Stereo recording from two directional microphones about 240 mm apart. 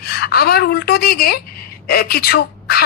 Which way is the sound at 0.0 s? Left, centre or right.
Left.